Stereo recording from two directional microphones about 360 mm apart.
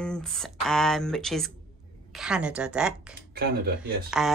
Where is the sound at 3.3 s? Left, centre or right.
Right.